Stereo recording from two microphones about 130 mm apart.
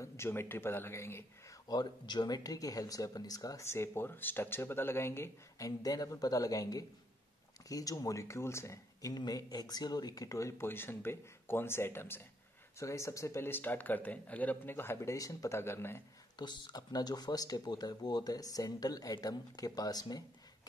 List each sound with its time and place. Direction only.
0.0 s speech: 20° left (ahead or behind)
1.7 s speech: 35° left (ahead or behind)
16.3 s speech: 35° left (ahead or behind)